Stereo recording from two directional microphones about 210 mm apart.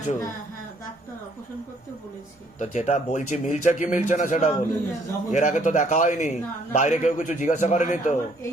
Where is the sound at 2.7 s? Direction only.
35° left (ahead or behind).